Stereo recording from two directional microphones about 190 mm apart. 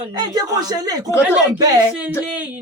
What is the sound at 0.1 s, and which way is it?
Speech, 20° right (ahead or behind).